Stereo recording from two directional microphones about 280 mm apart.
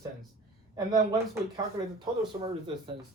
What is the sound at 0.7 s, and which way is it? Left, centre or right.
Speech, centre.